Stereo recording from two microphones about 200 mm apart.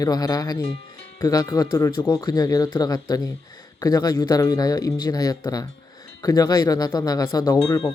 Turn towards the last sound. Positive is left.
turn(degrees=25)  # may be behind; listen again after turning